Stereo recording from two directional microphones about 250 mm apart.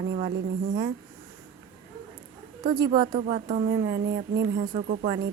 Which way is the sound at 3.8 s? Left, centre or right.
Right.